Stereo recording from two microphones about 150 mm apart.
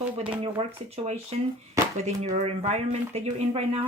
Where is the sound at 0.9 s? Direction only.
45° right (ahead or behind).